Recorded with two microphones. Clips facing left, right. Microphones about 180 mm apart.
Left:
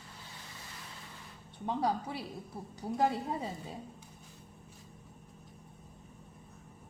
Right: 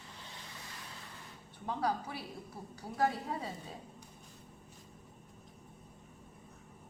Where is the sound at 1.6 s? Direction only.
25° left (ahead or behind).